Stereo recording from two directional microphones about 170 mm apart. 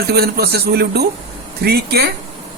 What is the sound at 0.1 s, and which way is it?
Speech, 70° right (ahead or behind).